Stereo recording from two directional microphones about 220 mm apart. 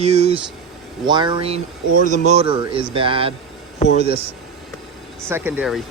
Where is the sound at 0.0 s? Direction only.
30° right (ahead or behind).